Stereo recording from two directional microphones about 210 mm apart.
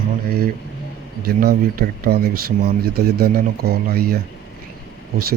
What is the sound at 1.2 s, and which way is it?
Speech, 45° right (ahead or behind).